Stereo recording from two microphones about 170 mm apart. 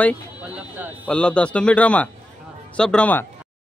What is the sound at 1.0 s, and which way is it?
A man's voice, 5° left (ahead or behind).